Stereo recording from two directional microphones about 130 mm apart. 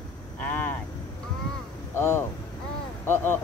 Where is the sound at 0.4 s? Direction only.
15° left (ahead or behind).